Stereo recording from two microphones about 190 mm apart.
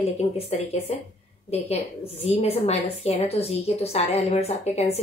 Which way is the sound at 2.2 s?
30° left (ahead or behind).